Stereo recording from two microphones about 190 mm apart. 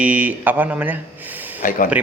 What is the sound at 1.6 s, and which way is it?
Speech, 45° left (ahead or behind).